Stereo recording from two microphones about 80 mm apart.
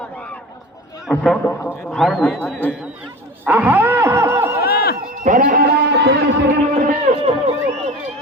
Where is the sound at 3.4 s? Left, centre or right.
Right.